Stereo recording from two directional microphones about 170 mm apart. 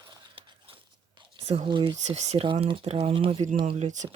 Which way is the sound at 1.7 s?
25° right (ahead or behind).